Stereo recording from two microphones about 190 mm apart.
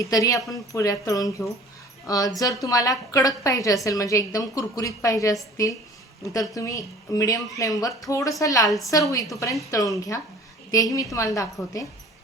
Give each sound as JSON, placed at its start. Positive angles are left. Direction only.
{"t": 0.0, "sound": "a woman's voice", "side_deg": 15}